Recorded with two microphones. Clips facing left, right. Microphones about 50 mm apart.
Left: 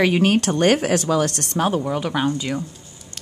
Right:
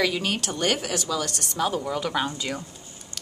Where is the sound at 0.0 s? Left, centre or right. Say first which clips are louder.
Left 8 dB; left.